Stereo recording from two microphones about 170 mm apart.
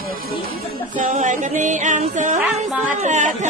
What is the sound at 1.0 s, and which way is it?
Speech, 45° right (ahead or behind).